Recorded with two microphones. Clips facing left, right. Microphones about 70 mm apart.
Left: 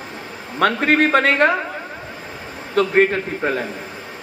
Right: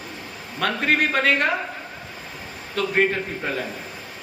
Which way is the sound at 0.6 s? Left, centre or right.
Left.